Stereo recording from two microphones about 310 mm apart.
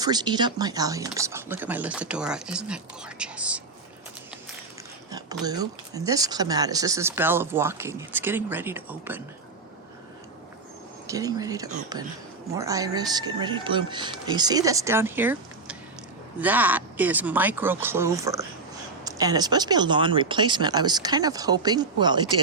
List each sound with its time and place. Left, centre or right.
0.0 s speech: centre
5.1 s speech: centre
11.0 s speech: centre